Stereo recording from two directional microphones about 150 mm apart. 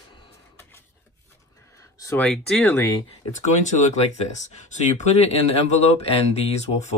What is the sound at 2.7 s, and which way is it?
Speech, 20° left (ahead or behind).